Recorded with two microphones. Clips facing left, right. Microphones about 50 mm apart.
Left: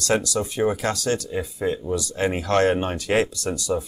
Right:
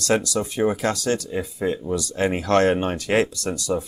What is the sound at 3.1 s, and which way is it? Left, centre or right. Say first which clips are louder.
Speech: even; centre.